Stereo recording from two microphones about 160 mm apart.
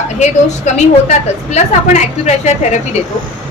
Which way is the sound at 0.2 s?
45° left (ahead or behind).